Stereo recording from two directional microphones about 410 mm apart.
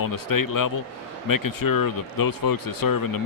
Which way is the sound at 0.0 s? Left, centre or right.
Left.